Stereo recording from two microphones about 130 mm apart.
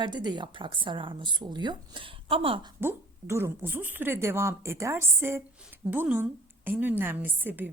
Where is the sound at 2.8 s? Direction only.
20° right (ahead or behind).